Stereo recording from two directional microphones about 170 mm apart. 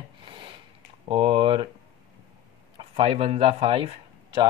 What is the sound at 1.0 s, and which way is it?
Speech, 30° right (ahead or behind).